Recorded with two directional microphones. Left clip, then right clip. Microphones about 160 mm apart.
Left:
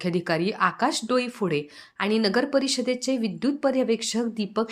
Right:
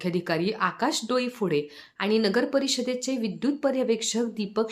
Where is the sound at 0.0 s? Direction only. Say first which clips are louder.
Left 2 dB; 20° left (ahead or behind).